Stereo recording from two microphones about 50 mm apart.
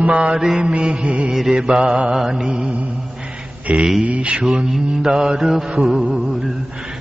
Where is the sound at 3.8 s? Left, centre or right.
Centre.